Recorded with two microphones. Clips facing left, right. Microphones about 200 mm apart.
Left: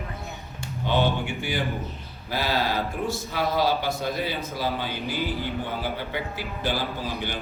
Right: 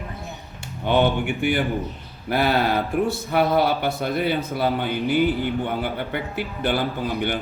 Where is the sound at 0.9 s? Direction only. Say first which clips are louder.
Right 5 dB; 60° right (ahead or behind).